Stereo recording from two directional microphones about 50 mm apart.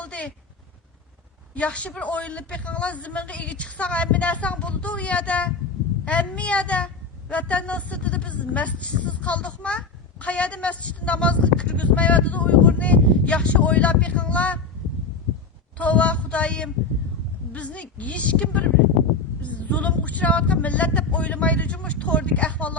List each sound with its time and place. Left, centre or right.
0.0 s a sound: left
1.5 s a woman's voice: left
15.8 s a woman's voice: left